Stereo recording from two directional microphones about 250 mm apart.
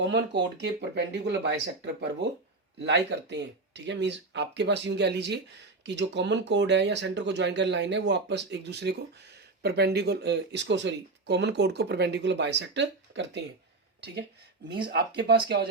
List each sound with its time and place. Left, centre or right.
0.0 s speech: right
14.8 s speech: right